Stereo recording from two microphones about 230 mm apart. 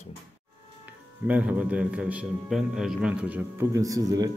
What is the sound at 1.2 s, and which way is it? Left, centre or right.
A man's voice, centre.